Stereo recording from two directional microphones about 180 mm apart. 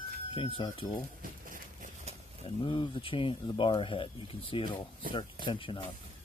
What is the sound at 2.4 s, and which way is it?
Speech, 30° left (ahead or behind).